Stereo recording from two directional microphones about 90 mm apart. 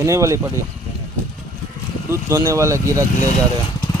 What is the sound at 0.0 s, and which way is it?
Speech, 35° right (ahead or behind).